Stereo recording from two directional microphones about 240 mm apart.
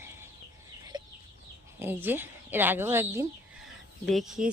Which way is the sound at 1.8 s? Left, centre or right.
Centre.